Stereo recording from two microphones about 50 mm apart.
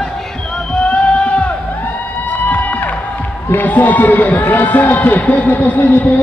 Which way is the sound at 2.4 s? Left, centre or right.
Left.